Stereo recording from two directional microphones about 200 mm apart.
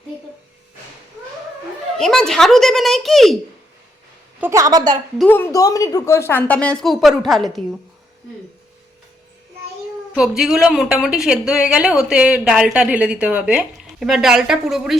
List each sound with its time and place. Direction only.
2.0 s a woman's voice: centre (ahead or behind)
4.4 s a woman's voice: 10° right (ahead or behind)
5.1 s a woman's voice: 5° left (ahead or behind)
10.2 s a woman's voice: 5° right (ahead or behind)